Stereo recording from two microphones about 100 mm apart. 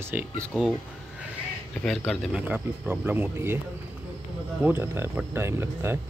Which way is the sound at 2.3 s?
15° right (ahead or behind).